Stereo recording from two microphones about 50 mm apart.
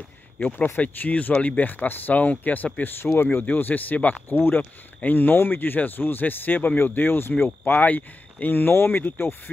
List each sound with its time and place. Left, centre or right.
0.4 s speech: left
2.8 s speech: left
3.4 s speech: left
7.6 s speech: left